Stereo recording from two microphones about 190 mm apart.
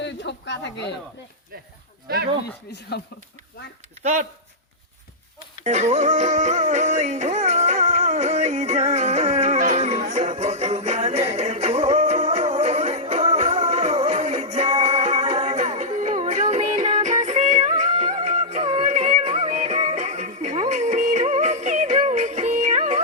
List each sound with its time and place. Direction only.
0.0 s speech: 70° left (ahead or behind)
2.9 s speech: 60° left (ahead or behind)
4.0 s speech: 40° right (ahead or behind)
5.6 s music: 35° right (ahead or behind)